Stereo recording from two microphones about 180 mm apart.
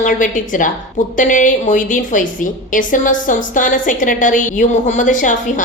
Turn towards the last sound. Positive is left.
turn(degrees=45)  # may be behind; listen again after turning